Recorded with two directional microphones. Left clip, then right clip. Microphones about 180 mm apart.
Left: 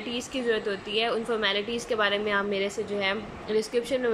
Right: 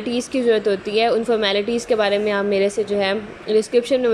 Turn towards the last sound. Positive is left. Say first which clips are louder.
# right 9 dB
turn(degrees=-20)  # may be behind; listen again after turning